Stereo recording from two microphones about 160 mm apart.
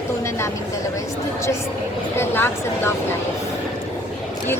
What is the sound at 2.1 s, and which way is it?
Speech, 15° left (ahead or behind).